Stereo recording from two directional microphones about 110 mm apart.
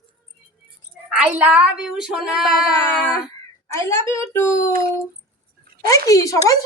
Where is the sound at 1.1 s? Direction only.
15° right (ahead or behind).